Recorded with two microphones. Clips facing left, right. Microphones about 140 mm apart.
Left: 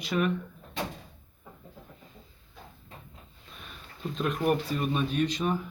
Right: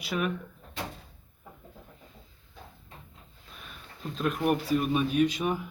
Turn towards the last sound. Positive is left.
turn(degrees=-10)  # may be behind; listen again after turning